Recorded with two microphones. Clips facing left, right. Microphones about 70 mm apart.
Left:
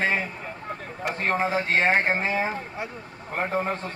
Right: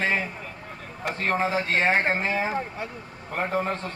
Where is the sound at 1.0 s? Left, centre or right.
Centre.